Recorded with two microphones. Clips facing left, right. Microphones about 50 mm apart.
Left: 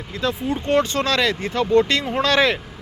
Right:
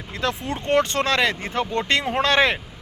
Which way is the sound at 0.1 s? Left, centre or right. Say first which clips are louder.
Left 2 dB; right.